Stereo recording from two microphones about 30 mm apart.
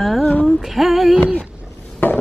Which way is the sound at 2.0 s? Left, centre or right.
Left.